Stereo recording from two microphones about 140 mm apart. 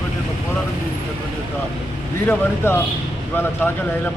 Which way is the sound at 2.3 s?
15° left (ahead or behind).